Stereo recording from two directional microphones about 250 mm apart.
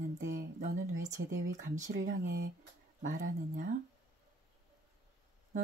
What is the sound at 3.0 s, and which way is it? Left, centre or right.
Speech, right.